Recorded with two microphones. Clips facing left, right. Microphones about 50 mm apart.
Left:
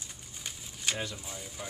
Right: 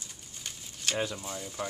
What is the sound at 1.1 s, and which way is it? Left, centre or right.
Speech, centre.